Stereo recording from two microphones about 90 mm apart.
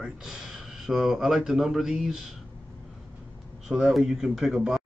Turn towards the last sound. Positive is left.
turn(degrees=-5)  # may be behind; listen again after turning